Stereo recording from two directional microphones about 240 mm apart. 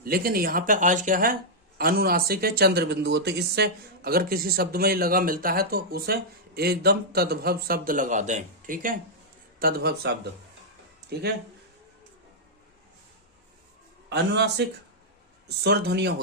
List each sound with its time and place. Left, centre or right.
0.0 s speech: right
11.1 s a man's voice: right
14.1 s a man's voice: right